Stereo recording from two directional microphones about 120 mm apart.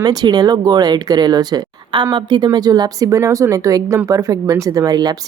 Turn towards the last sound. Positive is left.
turn(degrees=-35)  # may be behind; listen again after turning